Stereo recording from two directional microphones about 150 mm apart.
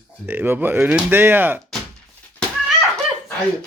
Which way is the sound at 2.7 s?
5° left (ahead or behind).